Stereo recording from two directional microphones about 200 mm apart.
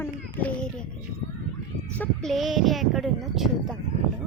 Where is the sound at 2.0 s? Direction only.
Centre (ahead or behind).